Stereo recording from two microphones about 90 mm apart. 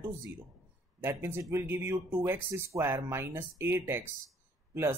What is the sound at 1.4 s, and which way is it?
Speech, 35° right (ahead or behind).